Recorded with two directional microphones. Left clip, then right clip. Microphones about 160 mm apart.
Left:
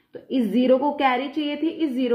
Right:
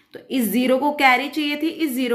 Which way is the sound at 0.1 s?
15° right (ahead or behind).